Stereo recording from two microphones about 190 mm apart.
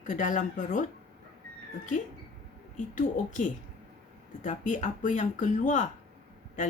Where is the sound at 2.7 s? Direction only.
45° left (ahead or behind).